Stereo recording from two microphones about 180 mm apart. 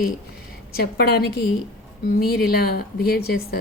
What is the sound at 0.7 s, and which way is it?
A woman's voice, 60° left (ahead or behind).